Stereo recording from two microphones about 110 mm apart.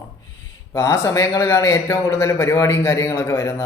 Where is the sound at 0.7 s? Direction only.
30° left (ahead or behind).